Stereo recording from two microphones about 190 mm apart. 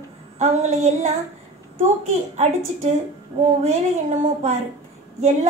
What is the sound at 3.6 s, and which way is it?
Speech, 40° right (ahead or behind).